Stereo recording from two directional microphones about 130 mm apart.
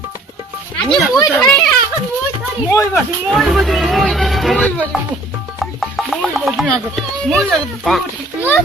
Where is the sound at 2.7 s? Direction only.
25° left (ahead or behind).